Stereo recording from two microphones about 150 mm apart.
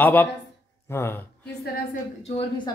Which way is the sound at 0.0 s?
10° left (ahead or behind).